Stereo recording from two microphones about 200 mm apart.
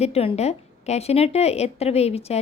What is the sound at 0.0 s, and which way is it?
A woman's voice, 30° left (ahead or behind).